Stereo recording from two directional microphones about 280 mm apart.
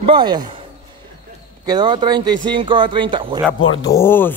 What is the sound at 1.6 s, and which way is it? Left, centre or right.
Speech, centre.